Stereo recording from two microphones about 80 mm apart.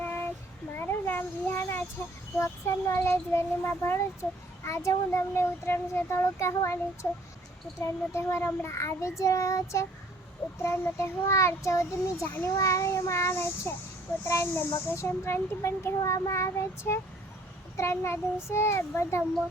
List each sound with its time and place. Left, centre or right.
0.0 s child singing: left
0.8 s a sound: left
2.4 s speech: left
8.1 s speech: left